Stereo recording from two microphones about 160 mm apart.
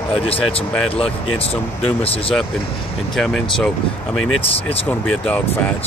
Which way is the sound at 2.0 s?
35° left (ahead or behind).